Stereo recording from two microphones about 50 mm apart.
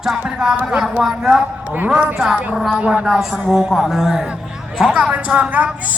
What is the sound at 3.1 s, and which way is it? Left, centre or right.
A man's voice, centre.